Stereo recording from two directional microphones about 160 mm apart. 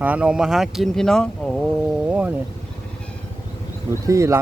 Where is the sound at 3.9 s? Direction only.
20° right (ahead or behind).